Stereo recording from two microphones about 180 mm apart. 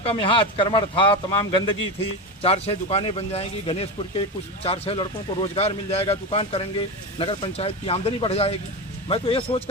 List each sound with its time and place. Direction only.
0.0 s speech: 30° left (ahead or behind)